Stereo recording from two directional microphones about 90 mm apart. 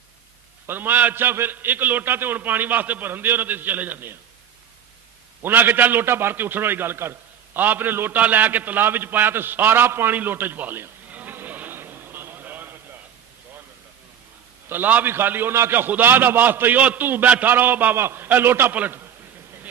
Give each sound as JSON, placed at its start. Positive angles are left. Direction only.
{"t": 0.7, "sound": "a man's voice", "side_deg": -20}
{"t": 5.4, "sound": "a man's voice", "side_deg": -20}
{"t": 14.7, "sound": "a man's voice", "side_deg": -20}